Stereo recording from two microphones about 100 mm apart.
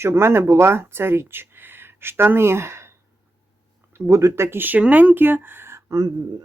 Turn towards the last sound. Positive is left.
turn(degrees=-40)  # may be behind; listen again after turning